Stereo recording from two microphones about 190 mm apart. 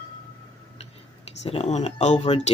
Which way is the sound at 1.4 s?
35° left (ahead or behind).